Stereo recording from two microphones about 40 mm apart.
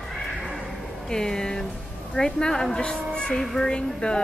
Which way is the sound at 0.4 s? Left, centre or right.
Centre.